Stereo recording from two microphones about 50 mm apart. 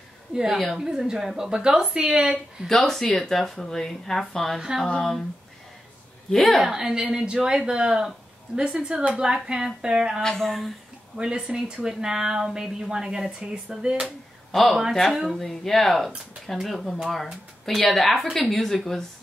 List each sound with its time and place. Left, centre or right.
0.3 s speech: centre
2.7 s speech: centre
6.3 s speech: centre
6.6 s speech: centre
10.2 s speech: centre
11.1 s speech: centre
14.5 s speech: centre